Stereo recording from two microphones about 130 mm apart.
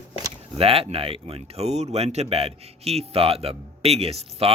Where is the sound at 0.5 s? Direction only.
45° right (ahead or behind).